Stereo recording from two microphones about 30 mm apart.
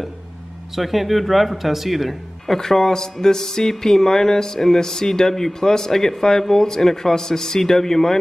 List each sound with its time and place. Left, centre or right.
0.7 s speech: centre
2.4 s a man's voice: centre